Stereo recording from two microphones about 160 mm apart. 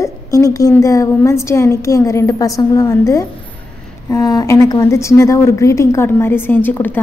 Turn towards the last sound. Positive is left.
turn(degrees=10)  # may be behind; listen again after turning